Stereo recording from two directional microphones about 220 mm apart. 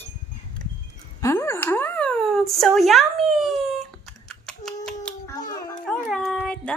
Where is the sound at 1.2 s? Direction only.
10° left (ahead or behind).